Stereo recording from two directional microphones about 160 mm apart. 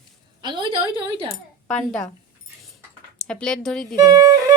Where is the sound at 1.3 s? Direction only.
5° left (ahead or behind).